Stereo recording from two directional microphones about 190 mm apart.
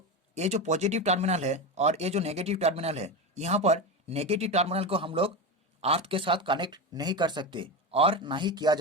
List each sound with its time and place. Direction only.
0.3 s speech: 35° right (ahead or behind)